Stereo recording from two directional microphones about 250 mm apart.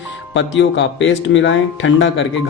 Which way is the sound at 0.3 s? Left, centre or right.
Left.